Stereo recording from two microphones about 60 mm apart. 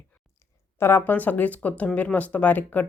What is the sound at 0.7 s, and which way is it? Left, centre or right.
Speech, left.